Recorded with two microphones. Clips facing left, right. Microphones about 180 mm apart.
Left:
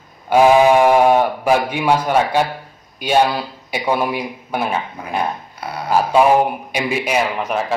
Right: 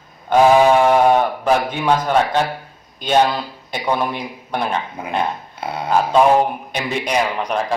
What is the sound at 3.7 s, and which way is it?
A man's voice, 10° left (ahead or behind).